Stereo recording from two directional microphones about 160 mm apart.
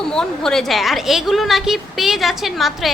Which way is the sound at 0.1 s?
5° left (ahead or behind).